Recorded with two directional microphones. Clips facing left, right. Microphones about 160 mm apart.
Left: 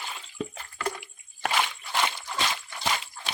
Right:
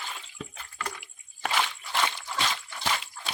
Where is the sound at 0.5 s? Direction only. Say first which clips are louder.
Left 5 dB; 35° left (ahead or behind).